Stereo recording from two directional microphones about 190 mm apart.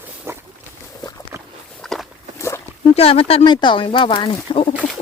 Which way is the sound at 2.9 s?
30° left (ahead or behind).